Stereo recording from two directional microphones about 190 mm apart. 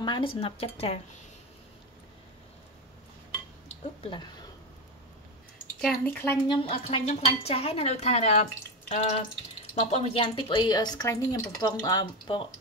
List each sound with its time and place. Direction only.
0.0 s speech: 25° left (ahead or behind)
4.0 s speech: 25° left (ahead or behind)
6.0 s speech: 10° left (ahead or behind)
6.4 s speech: 25° left (ahead or behind)